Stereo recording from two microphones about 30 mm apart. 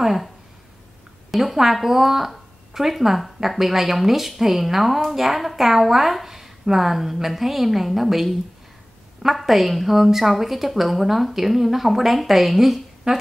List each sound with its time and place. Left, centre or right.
0.0 s a woman's voice: centre
1.3 s a woman's voice: centre
13.0 s a woman's voice: right